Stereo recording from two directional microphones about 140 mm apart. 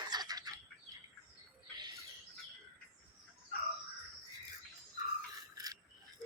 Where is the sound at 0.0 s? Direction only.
30° right (ahead or behind).